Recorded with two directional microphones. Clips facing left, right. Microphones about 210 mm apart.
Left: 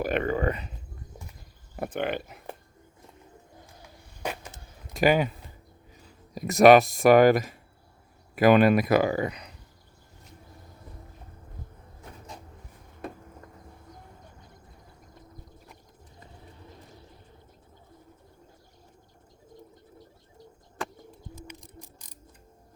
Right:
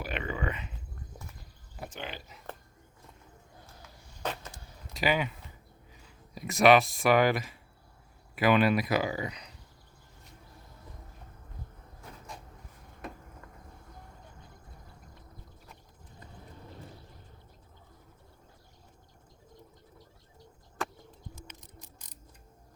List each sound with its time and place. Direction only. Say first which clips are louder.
0.0 s speech: left 9 dB; 50° left (ahead or behind)
1.7 s speech: left 12 dB; 55° left (ahead or behind)
4.2 s vehicle: left 2 dB; 10° left (ahead or behind)
4.9 s speech: left 7 dB; 45° left (ahead or behind)
21.4 s ratchet: left 6 dB; 10° left (ahead or behind)